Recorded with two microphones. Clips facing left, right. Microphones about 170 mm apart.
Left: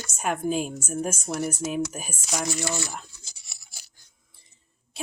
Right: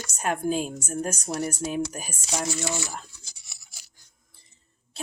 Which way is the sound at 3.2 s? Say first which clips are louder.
Left 1 dB; 25° left (ahead or behind).